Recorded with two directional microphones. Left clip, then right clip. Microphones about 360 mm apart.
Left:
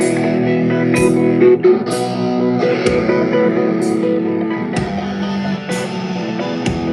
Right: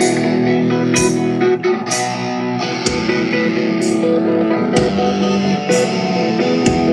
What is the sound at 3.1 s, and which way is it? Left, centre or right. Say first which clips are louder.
Music: left 3 dB; centre.